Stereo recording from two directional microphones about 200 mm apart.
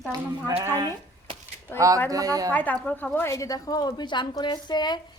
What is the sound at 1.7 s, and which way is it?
Speech, 15° right (ahead or behind).